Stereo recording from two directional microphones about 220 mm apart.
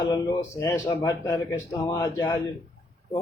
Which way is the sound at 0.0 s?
15° left (ahead or behind).